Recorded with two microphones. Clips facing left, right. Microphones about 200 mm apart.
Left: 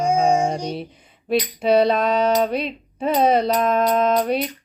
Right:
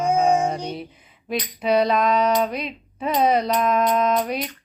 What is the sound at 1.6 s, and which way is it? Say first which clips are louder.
Music: left 1 dB; 30° left (ahead or behind).